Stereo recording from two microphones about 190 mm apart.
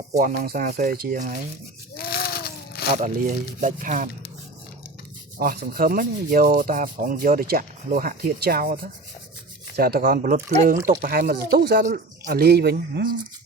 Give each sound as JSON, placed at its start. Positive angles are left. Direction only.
{"t": 0.1, "sound": "rub", "side_deg": -40}
{"t": 2.0, "sound": "a sound", "side_deg": 55}
{"t": 2.9, "sound": "speech", "side_deg": -40}
{"t": 5.4, "sound": "rub", "side_deg": -50}
{"t": 12.2, "sound": "speech", "side_deg": -55}